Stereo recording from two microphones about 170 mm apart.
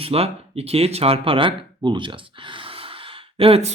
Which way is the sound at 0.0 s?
35° right (ahead or behind).